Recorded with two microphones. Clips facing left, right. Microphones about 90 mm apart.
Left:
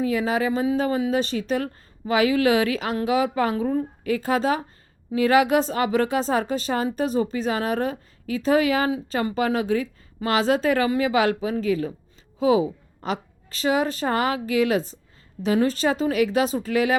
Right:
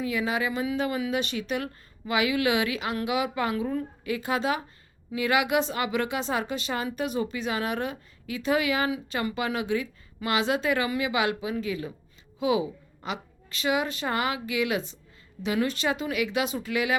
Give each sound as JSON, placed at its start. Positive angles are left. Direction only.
{"t": 0.0, "sound": "a woman's voice", "side_deg": 35}